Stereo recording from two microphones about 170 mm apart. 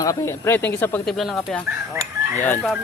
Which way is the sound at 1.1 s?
Centre (ahead or behind).